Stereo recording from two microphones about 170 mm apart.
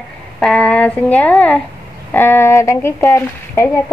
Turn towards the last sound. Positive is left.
turn(degrees=15)  # may be behind; listen again after turning